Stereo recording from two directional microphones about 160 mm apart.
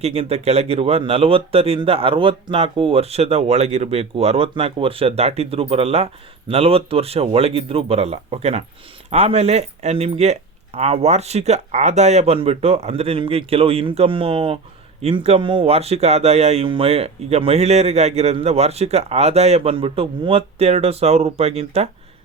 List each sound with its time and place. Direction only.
0.0 s speech: 40° right (ahead or behind)